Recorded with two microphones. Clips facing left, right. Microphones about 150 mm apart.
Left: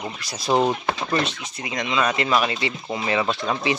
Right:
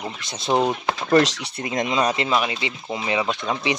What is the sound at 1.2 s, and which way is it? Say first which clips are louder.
Speech: right 7 dB; 85° right.